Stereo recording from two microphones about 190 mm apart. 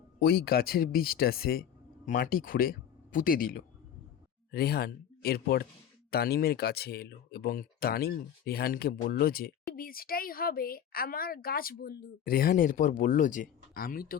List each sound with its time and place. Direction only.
0.2 s speech: 55° left (ahead or behind)